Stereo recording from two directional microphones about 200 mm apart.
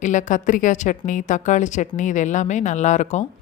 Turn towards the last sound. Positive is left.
turn(degrees=35)  # may be behind; listen again after turning